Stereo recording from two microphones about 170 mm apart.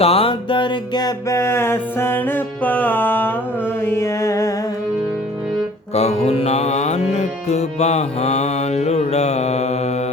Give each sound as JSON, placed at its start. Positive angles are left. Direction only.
{"t": 0.0, "sound": "music", "side_deg": 35}
{"t": 5.9, "sound": "mantra", "side_deg": 40}